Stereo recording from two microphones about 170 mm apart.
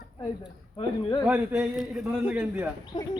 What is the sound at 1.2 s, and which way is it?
Speech, 10° right (ahead or behind).